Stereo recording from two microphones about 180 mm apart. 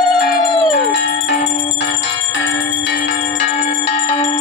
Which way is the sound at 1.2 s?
65° left (ahead or behind).